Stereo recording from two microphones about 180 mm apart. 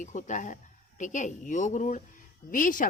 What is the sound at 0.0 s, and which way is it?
Speech, 45° left (ahead or behind).